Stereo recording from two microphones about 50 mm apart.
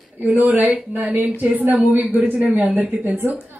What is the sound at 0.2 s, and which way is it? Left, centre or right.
Speech, right.